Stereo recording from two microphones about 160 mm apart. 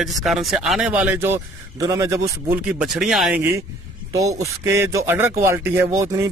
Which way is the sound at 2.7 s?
5° right (ahead or behind).